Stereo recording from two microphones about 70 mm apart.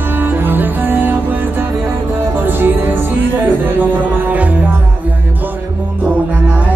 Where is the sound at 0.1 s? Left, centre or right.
Right.